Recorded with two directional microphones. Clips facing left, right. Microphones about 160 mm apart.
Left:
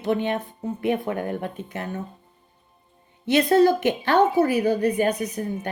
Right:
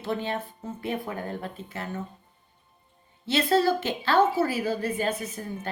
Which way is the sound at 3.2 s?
15° left (ahead or behind).